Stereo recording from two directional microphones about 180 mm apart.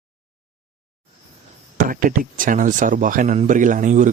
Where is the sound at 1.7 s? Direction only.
50° right (ahead or behind).